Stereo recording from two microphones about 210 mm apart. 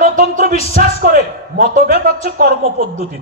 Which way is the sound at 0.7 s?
45° right (ahead or behind).